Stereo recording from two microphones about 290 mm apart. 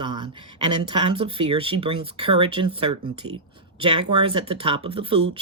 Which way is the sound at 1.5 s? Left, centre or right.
Centre.